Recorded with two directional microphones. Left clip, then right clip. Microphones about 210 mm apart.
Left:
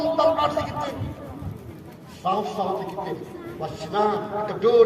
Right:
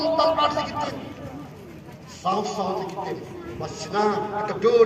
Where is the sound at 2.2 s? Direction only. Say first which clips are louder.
Even; 30° left (ahead or behind).